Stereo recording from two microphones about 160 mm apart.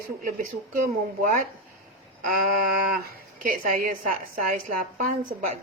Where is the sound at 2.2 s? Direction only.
65° right (ahead or behind).